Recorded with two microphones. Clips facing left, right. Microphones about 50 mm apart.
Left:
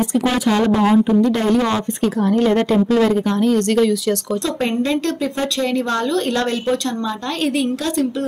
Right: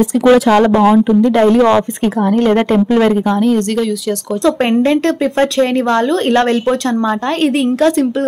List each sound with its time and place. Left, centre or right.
0.3 s speech: right
1.2 s a woman's voice: right
2.3 s a woman's voice: right
7.4 s a woman's voice: right